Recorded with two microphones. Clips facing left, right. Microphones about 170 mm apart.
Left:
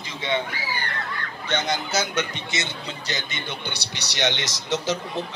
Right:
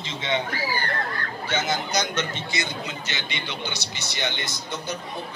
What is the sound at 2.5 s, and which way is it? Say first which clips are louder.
A man's voice: right 1 dB; 25° left (ahead or behind).